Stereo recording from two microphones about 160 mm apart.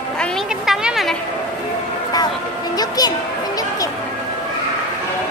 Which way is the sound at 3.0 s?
25° left (ahead or behind).